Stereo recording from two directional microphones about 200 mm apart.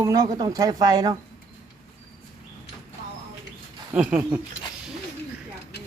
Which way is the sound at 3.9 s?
5° right (ahead or behind).